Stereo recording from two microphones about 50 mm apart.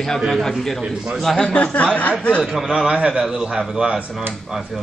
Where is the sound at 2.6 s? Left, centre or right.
Centre.